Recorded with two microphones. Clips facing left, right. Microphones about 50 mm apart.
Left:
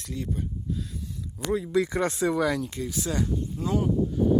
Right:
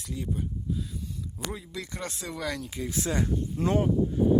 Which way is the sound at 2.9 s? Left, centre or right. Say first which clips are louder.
Right 1 dB; right.